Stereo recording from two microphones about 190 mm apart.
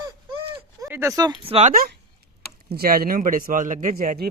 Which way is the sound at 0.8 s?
10° right (ahead or behind).